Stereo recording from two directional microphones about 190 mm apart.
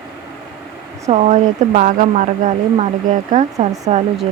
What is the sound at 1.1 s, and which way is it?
Speech, 35° right (ahead or behind).